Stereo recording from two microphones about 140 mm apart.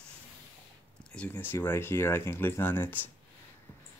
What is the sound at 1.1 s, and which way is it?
Speech, 10° left (ahead or behind).